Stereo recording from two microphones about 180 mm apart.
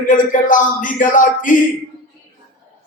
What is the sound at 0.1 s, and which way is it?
A man's voice, 45° left (ahead or behind).